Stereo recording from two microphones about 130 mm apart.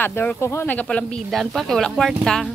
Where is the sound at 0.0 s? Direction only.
15° left (ahead or behind).